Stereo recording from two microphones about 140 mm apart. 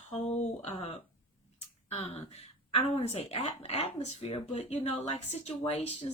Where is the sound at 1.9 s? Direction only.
50° left (ahead or behind).